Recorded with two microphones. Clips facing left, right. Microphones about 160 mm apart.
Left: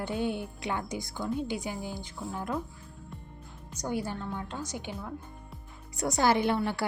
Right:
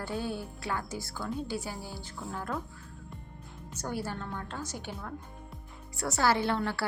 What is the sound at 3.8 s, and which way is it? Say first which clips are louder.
A woman's voice: left 3 dB; 15° left (ahead or behind).